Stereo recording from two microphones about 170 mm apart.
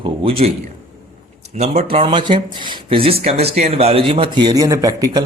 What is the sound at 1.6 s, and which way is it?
Speech, 40° right (ahead or behind).